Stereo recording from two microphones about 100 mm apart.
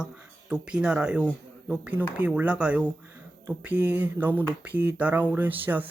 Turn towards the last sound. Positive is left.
turn(degrees=-15)  # may be behind; listen again after turning